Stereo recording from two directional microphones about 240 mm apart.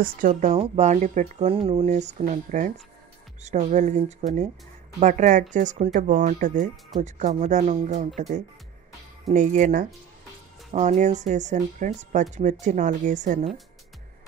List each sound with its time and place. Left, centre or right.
0.0 s speech: right
5.0 s speech: right
9.3 s speech: right